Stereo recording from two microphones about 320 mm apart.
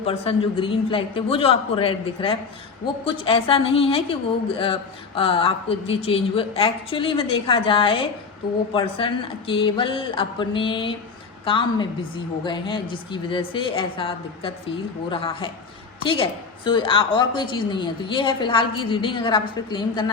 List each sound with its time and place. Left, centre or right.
0.0 s a woman's voice: centre